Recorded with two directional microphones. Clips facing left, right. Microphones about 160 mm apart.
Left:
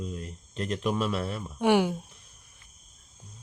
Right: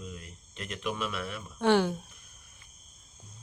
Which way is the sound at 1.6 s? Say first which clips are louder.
Left 1 dB; 10° left (ahead or behind).